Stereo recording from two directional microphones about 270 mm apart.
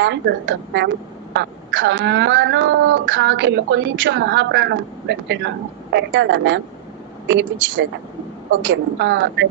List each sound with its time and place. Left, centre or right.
0.0 s a woman's voice: right